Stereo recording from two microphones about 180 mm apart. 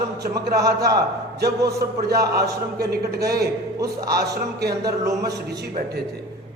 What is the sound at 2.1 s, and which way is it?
Speech, 65° right (ahead or behind).